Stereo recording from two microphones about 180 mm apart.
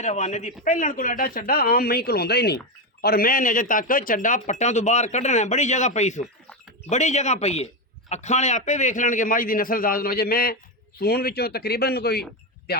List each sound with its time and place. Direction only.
0.0 s a man's voice: 40° left (ahead or behind); by 12.2 s 60° left (ahead or behind)